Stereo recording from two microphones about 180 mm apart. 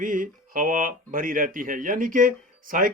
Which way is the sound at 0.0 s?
50° right (ahead or behind).